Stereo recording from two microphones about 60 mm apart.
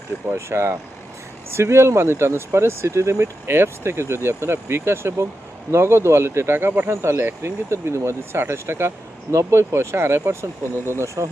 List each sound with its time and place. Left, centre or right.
0.3 s speech: right
11.0 s speech: right